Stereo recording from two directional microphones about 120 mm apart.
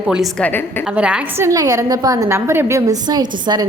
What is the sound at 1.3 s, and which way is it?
A woman's voice, 25° right (ahead or behind).